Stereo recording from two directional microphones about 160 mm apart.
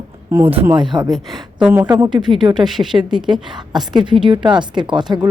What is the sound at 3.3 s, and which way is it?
A woman's voice, 25° right (ahead or behind).